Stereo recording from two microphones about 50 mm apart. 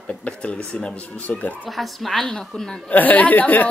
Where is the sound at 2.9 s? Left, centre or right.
Left.